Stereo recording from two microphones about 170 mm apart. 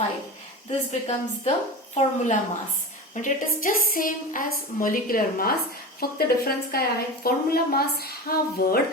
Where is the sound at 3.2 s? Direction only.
55° left (ahead or behind).